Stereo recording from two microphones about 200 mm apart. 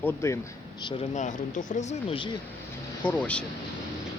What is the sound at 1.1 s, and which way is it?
Speech, 40° left (ahead or behind).